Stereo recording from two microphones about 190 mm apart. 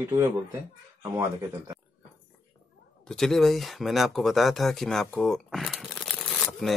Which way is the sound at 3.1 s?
Centre (ahead or behind).